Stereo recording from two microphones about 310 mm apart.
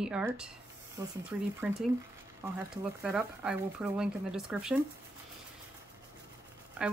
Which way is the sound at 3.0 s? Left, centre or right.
Centre.